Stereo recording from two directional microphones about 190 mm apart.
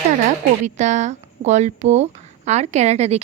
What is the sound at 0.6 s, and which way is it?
Speech, 40° right (ahead or behind).